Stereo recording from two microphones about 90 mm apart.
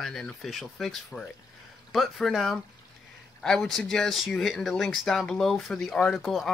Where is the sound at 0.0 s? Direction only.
5° left (ahead or behind).